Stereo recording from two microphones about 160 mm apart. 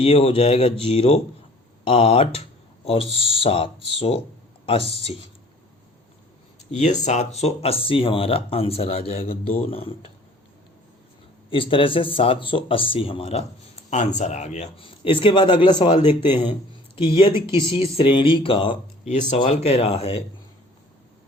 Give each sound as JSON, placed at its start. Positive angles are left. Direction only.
{"t": 0.0, "sound": "speech", "side_deg": 35}
{"t": 6.7, "sound": "speech", "side_deg": 45}
{"t": 11.5, "sound": "speech", "side_deg": 35}
{"t": 19.3, "sound": "speech", "side_deg": 45}